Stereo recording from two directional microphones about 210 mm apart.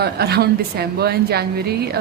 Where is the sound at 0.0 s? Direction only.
50° right (ahead or behind).